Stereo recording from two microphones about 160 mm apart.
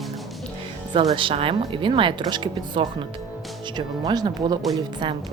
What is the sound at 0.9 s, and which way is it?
Speech, 35° right (ahead or behind).